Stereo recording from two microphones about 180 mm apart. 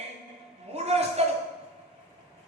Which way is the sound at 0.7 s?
35° right (ahead or behind).